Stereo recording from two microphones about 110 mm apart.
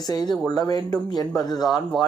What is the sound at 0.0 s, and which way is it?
Speech, 40° left (ahead or behind).